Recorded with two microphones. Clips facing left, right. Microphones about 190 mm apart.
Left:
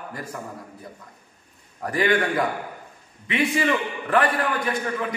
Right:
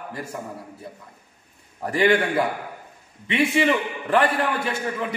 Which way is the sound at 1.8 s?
25° right (ahead or behind).